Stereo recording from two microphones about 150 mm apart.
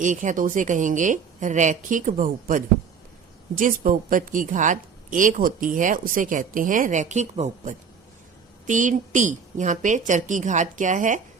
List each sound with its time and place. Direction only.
0.0 s speech: 60° right (ahead or behind)